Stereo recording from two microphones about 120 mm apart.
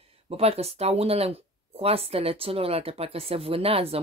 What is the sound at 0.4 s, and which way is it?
Speech, 60° right (ahead or behind).